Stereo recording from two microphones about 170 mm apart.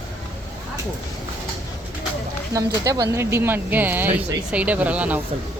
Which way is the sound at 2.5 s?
20° right (ahead or behind).